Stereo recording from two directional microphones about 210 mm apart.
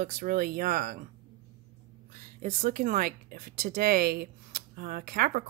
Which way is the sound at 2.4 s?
35° right (ahead or behind).